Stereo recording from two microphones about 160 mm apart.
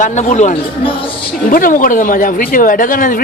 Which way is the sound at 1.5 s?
60° left (ahead or behind).